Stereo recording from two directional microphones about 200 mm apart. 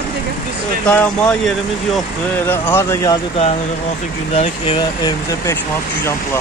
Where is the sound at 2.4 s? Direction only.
10° left (ahead or behind).